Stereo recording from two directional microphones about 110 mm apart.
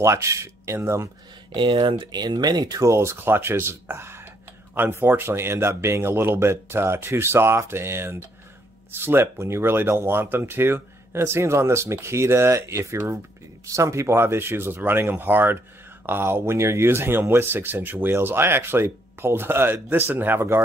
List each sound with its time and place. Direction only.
0.0 s speech: 25° right (ahead or behind)
1.5 s speech: 50° right (ahead or behind); by 20.6 s 20° right (ahead or behind)